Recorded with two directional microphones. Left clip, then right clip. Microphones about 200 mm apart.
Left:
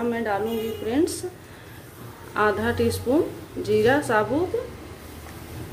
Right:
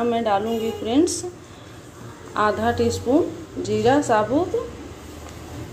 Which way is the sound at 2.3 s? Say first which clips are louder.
Right 2 dB; 5° left (ahead or behind).